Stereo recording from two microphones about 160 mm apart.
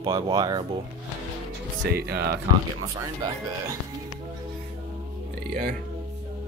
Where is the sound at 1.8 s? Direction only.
85° right.